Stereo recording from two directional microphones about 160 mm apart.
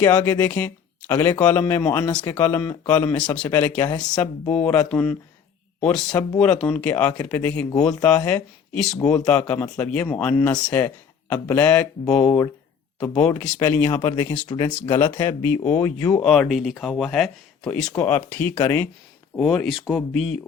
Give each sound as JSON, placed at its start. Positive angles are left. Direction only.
{"t": 0.0, "sound": "speech", "side_deg": 15}
{"t": 3.8, "sound": "speech", "side_deg": 25}
{"t": 4.2, "sound": "speech", "side_deg": 10}
{"t": 6.1, "sound": "speech", "side_deg": 25}
{"t": 6.4, "sound": "speech", "side_deg": 5}
{"t": 13.7, "sound": "speech", "side_deg": 20}
{"t": 16.2, "sound": "speech", "side_deg": 0}
{"t": 17.9, "sound": "speech", "side_deg": 15}
{"t": 19.4, "sound": "speech", "side_deg": 0}